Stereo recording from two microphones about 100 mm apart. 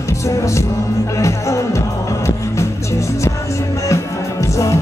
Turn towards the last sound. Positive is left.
turn(degrees=30)  # may be behind; listen again after turning